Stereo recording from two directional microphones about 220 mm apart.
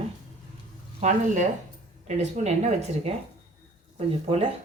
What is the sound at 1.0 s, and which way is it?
Speech, 30° right (ahead or behind).